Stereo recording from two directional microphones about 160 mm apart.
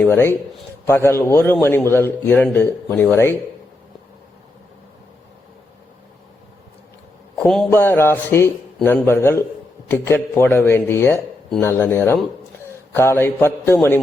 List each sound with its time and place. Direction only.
0.0 s a man's voice: 15° left (ahead or behind)
7.3 s a man's voice: 5° left (ahead or behind)
7.7 s a man's voice: 15° left (ahead or behind)